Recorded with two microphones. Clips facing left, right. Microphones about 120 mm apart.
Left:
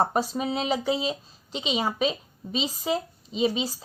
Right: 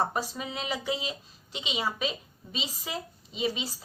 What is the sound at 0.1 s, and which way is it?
A woman's voice, 35° left (ahead or behind).